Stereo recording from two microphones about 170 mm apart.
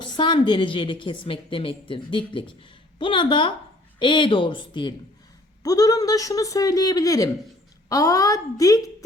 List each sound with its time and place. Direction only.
0.0 s a woman's voice: 25° left (ahead or behind)